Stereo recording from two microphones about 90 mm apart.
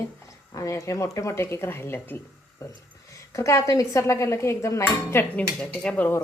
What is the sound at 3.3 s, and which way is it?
Speech, 35° left (ahead or behind).